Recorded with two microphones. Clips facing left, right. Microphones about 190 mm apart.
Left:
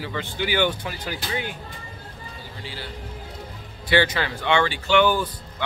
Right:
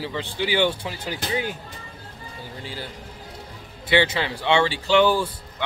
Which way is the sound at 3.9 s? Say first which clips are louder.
Even; 25° right (ahead or behind).